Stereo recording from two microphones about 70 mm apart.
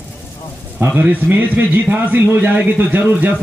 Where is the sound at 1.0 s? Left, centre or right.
Right.